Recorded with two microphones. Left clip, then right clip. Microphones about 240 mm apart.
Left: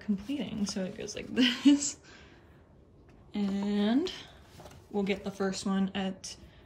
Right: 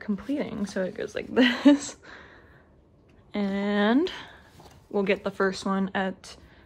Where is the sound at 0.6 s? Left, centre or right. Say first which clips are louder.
Right 6 dB; centre.